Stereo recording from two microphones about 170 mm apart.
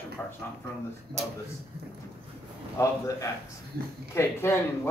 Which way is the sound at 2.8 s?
20° left (ahead or behind).